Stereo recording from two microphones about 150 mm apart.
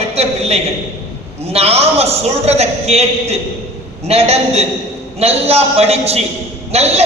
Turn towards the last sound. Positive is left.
turn(degrees=-45)  # may be behind; listen again after turning